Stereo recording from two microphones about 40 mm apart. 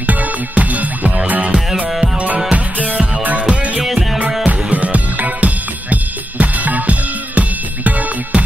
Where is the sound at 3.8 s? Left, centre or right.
Centre.